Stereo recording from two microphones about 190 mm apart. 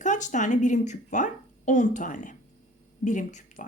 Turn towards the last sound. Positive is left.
turn(degrees=40)  # may be behind; listen again after turning